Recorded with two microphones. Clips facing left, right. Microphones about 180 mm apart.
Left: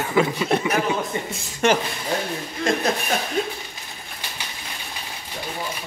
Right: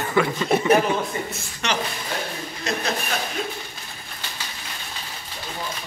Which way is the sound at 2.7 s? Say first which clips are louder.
Left 5 dB; 50° left (ahead or behind).